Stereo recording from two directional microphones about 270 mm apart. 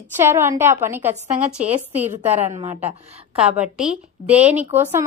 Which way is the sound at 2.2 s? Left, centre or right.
Right.